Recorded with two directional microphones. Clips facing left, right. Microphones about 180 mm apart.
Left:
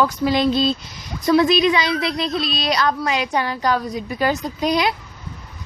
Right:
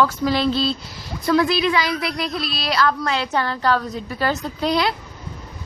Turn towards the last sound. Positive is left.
turn(degrees=15)  # may be behind; listen again after turning